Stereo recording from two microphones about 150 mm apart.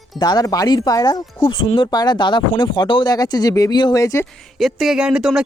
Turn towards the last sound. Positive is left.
turn(degrees=-5)  # may be behind; listen again after turning